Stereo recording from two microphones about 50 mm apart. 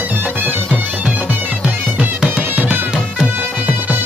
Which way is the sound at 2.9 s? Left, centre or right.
Centre.